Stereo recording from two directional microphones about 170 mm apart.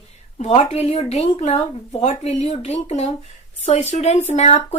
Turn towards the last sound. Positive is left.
turn(degrees=40)  # may be behind; listen again after turning